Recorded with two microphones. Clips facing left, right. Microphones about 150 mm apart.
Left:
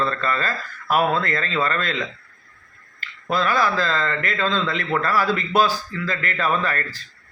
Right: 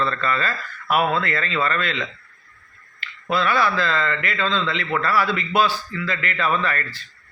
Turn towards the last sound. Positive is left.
turn(degrees=40)  # may be behind; listen again after turning